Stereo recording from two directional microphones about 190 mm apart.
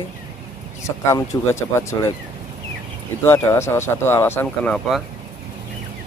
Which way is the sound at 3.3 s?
15° left (ahead or behind).